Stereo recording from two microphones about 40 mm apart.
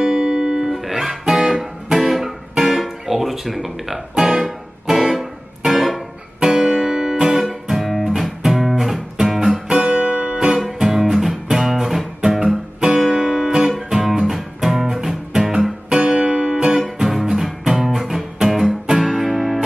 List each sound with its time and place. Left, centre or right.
0.0 s music: centre
0.7 s guitar: centre
1.2 s music: centre
9.9 s guitar: right
10.4 s music: centre